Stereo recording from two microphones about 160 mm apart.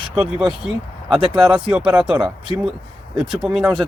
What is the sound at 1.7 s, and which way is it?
Speech, 10° right (ahead or behind).